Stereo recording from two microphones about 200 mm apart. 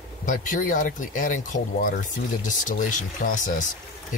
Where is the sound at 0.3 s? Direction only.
40° left (ahead or behind).